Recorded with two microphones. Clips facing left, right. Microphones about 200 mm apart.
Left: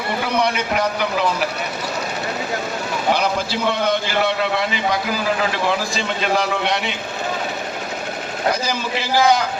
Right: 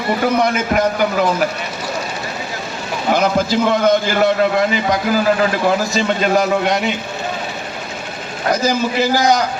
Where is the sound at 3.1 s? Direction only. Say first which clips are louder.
Right 6 dB; 45° right (ahead or behind).